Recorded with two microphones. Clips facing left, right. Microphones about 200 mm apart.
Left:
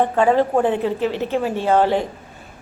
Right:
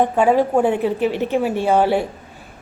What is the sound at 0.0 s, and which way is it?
A woman's voice, 10° right (ahead or behind).